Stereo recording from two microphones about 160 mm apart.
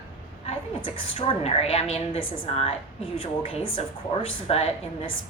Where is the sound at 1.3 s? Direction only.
40° left (ahead or behind).